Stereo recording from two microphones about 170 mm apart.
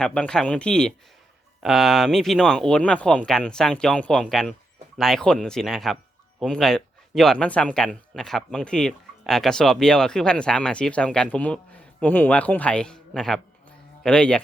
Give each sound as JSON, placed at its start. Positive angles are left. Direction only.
{"t": 0.0, "sound": "speech", "side_deg": 5}